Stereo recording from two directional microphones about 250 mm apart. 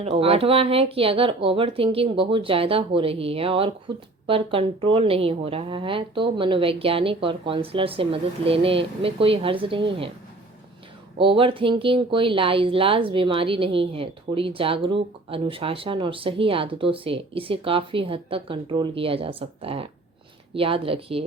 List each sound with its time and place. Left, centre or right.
0.0 s speech: right
11.2 s speech: right